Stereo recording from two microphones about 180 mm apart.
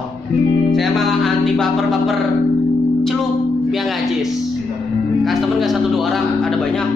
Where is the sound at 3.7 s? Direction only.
Centre (ahead or behind).